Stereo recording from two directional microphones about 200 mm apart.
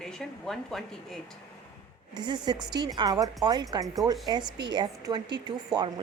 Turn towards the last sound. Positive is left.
turn(degrees=-20)  # may be behind; listen again after turning